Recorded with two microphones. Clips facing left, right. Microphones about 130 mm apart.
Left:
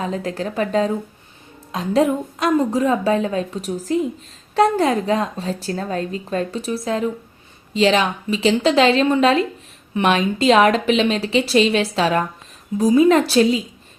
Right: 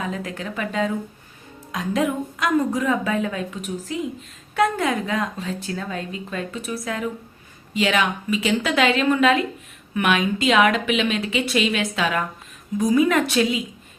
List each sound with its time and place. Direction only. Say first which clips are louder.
0.0 s a woman's voice: left 5 dB; 30° left (ahead or behind)